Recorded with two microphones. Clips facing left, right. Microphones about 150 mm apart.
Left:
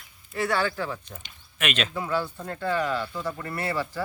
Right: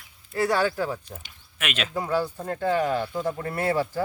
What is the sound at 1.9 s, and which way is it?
Speech, 40° right (ahead or behind).